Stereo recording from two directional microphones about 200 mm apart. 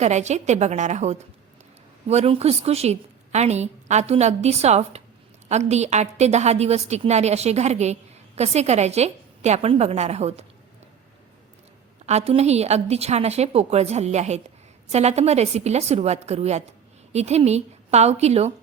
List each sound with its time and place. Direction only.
0.0 s a woman's voice: 35° right (ahead or behind)
12.0 s a woman's voice: 30° right (ahead or behind)